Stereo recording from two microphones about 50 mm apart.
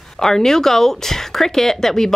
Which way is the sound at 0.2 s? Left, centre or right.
Centre.